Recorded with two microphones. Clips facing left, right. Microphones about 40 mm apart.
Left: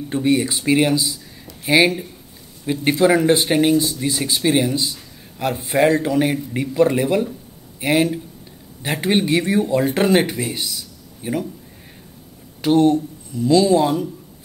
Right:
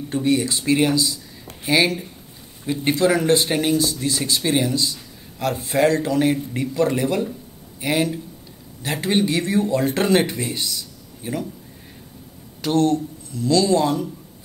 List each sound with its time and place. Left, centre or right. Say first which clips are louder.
0.1 s speech: left 2 dB; centre
12.6 s speech: left 4 dB; centre